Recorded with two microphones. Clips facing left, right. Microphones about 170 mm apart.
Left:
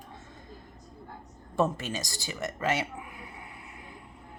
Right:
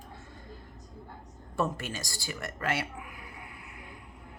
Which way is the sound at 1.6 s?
20° left (ahead or behind).